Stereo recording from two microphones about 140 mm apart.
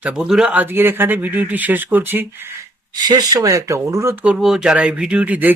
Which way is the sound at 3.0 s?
30° right (ahead or behind).